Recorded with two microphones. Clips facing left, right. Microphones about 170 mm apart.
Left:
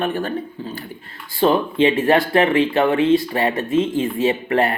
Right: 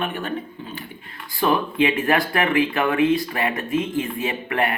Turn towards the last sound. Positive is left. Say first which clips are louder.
# left 6 dB
turn(degrees=30)  # may be behind; listen again after turning